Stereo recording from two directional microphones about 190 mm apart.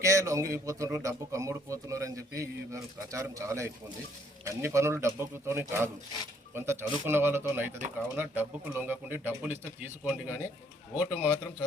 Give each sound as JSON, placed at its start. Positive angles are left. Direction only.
{"t": 0.0, "sound": "a man's voice", "side_deg": -15}